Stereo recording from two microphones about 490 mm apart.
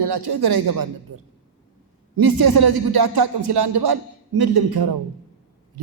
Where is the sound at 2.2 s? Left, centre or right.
Right.